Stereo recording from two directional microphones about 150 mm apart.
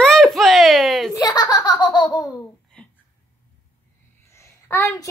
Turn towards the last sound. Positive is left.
turn(degrees=15)  # may be behind; listen again after turning